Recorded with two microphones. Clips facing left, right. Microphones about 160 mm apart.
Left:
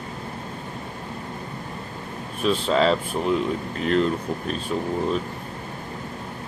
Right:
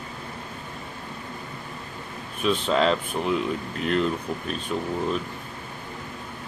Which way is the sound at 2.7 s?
Centre (ahead or behind).